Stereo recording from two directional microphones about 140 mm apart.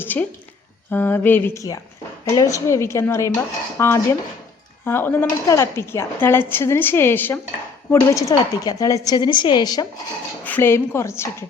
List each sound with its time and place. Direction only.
0.0 s a sound: 15° left (ahead or behind)
0.9 s a woman's voice: 15° left (ahead or behind); by 9.8 s 30° left (ahead or behind)
10.4 s speech: 15° left (ahead or behind)